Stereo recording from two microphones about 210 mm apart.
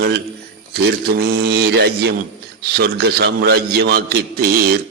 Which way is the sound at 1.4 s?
50° right (ahead or behind).